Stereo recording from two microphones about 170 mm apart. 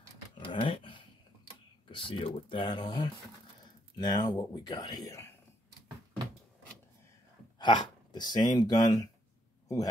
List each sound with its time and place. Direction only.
0.4 s a sound: 30° left (ahead or behind)
1.9 s speech: 30° left (ahead or behind)
7.5 s speech: 25° left (ahead or behind)